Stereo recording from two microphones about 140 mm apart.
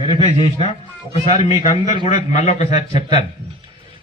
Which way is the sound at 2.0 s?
45° left (ahead or behind).